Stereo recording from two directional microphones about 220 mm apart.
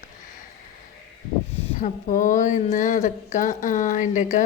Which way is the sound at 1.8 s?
35° left (ahead or behind).